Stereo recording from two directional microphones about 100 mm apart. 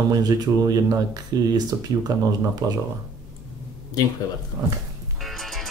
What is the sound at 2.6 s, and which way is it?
Speech, 35° right (ahead or behind).